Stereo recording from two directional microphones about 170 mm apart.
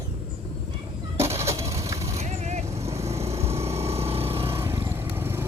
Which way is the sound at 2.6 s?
15° right (ahead or behind).